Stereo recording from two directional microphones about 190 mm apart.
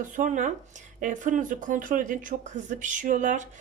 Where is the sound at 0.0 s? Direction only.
45° right (ahead or behind).